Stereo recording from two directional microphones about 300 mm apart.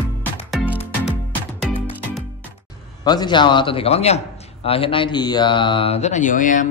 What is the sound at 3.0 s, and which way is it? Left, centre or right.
Speech, centre.